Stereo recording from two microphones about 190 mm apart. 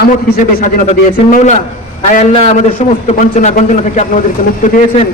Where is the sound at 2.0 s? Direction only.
35° left (ahead or behind).